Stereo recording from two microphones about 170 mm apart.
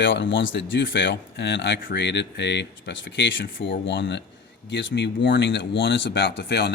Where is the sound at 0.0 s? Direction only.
90° left.